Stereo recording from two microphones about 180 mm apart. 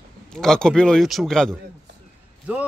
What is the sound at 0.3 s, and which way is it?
A man's voice, 5° left (ahead or behind).